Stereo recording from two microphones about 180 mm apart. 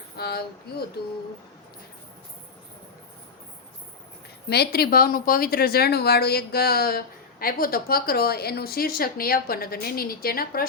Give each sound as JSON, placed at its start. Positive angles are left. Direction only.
{"t": 0.2, "sound": "speech", "side_deg": 60}
{"t": 4.4, "sound": "speech", "side_deg": 65}